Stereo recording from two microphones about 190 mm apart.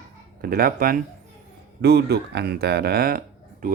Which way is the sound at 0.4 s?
50° right (ahead or behind).